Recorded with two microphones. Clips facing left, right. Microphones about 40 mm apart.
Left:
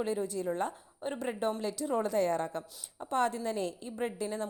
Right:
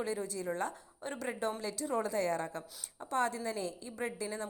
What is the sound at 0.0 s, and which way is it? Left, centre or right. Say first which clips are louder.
A woman's voice: left 4 dB; left.